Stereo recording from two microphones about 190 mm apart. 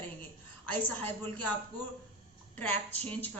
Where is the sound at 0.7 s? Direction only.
10° left (ahead or behind).